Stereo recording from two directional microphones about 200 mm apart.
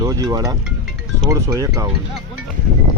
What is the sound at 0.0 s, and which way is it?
Speech, 20° right (ahead or behind).